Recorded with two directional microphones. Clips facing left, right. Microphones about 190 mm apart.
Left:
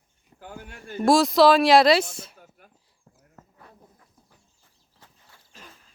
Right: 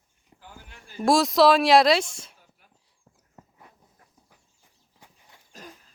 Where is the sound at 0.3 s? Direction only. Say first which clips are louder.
Left 8 dB; 55° left (ahead or behind).